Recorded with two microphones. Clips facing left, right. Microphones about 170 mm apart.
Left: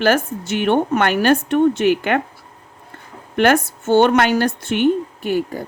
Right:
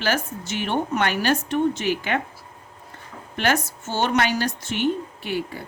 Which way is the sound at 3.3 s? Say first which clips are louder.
Left 8 dB; 55° left (ahead or behind).